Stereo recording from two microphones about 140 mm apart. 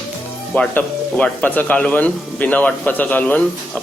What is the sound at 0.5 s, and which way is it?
Speech, 10° left (ahead or behind).